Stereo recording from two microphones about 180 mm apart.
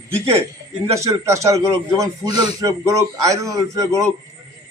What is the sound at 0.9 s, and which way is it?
A man's voice, 15° right (ahead or behind).